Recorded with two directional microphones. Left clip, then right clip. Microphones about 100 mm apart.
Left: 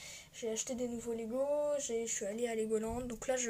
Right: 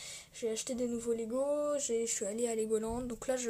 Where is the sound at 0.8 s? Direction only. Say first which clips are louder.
Right 4 dB; 90° right; by 2.2 s 75° right (ahead or behind).